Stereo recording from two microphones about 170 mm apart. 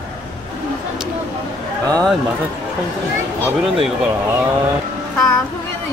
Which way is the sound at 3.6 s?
Centre (ahead or behind).